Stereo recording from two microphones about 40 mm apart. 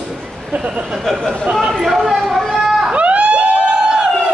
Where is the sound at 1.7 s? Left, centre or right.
Centre.